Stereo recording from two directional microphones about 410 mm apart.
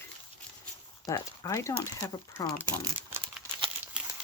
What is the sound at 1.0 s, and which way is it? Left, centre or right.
Speech, centre.